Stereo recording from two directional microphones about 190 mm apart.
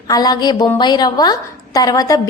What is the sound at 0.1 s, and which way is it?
A woman's voice, 20° left (ahead or behind).